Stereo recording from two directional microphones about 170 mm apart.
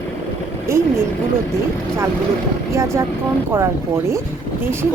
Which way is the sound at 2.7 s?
15° right (ahead or behind).